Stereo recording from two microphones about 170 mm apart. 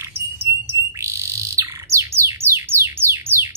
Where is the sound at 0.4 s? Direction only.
15° right (ahead or behind).